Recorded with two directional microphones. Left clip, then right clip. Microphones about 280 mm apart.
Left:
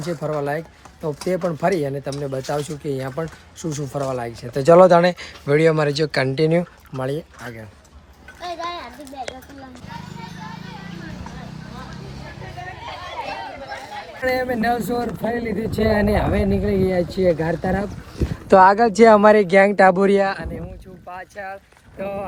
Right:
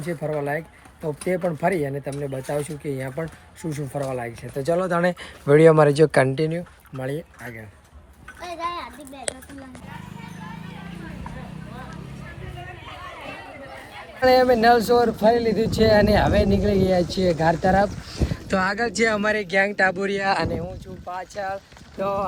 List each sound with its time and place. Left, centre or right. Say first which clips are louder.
0.1 s speech: left 2 dB; centre
4.5 s speech: left 10 dB; left
4.8 s speech: left 10 dB; centre
6.9 s speech: left 4 dB; centre
8.4 s a sound: left 1 dB; right
14.2 s speech: right 6 dB; centre
18.4 s speech: left 11 dB; centre
21.1 s speech: right 3 dB; centre